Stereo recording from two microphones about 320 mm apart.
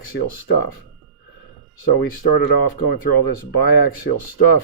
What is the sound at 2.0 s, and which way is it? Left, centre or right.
Speech, left.